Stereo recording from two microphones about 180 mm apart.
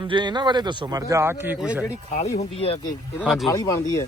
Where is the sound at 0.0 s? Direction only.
25° right (ahead or behind); by 1.8 s 5° right (ahead or behind).